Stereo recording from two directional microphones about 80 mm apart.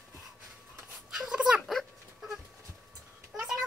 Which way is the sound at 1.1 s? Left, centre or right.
Centre.